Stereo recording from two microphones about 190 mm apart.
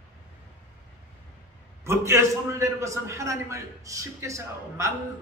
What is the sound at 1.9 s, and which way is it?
A man's voice, 15° right (ahead or behind).